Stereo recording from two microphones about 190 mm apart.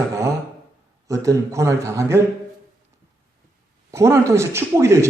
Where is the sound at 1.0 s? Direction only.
15° right (ahead or behind).